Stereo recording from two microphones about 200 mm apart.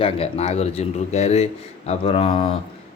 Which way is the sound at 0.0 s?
30° left (ahead or behind).